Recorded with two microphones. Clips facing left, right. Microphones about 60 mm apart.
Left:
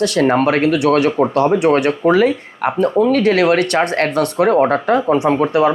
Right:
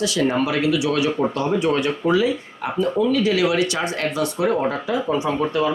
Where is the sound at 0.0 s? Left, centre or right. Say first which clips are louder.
Left 6 dB; left.